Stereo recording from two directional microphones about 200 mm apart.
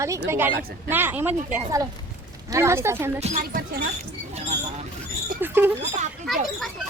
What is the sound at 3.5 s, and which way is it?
Speech, 45° right (ahead or behind).